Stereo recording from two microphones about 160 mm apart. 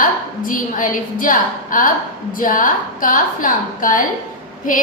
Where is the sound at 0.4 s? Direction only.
55° left (ahead or behind).